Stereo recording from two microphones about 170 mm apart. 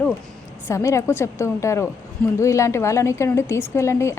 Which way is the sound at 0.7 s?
15° left (ahead or behind).